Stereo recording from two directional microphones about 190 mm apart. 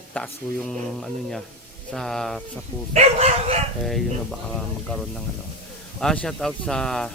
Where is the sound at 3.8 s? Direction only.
Centre (ahead or behind).